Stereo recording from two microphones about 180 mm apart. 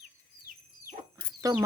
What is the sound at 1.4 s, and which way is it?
Speech, 20° right (ahead or behind).